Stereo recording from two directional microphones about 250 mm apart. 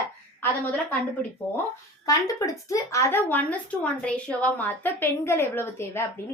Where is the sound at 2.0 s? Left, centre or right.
Centre.